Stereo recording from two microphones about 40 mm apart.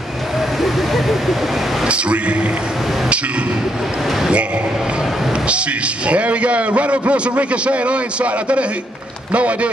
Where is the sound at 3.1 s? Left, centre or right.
Right.